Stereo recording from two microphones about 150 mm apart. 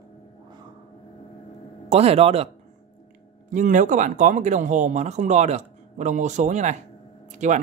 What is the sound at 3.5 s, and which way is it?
Speech, 55° right (ahead or behind).